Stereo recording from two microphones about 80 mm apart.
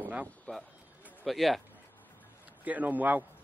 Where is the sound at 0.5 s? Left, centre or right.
Centre.